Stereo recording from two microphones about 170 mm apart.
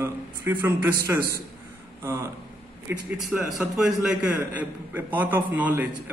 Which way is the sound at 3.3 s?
Centre (ahead or behind).